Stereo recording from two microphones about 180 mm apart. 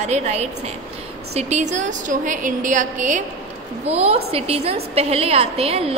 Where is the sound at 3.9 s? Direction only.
35° right (ahead or behind).